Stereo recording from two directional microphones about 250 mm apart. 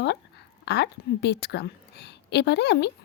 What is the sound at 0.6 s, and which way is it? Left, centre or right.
A woman's voice, left.